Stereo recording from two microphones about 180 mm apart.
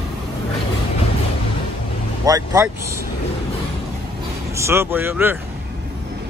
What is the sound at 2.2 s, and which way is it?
Speech, 20° right (ahead or behind).